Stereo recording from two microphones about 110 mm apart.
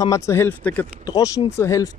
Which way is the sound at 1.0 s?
35° left (ahead or behind).